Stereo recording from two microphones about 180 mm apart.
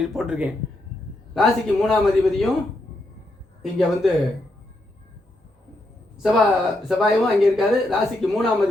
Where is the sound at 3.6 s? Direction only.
Centre (ahead or behind).